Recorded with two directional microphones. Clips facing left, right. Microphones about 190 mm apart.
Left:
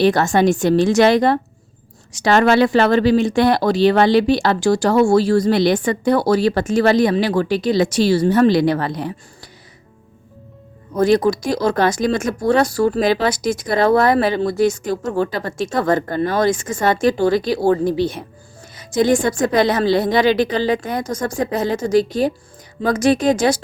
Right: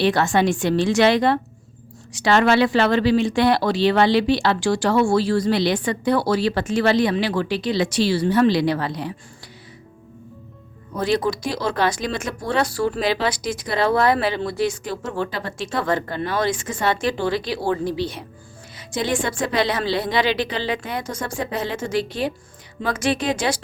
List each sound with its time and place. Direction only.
0.0 s speech: 45° left (ahead or behind)
10.9 s speech: 45° left (ahead or behind)